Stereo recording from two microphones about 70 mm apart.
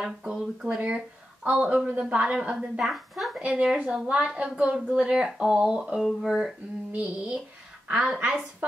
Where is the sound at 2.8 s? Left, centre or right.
Centre.